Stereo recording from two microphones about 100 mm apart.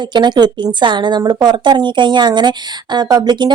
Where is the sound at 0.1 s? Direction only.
50° right (ahead or behind).